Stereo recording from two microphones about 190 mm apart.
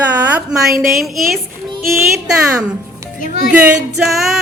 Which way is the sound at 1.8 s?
Centre (ahead or behind).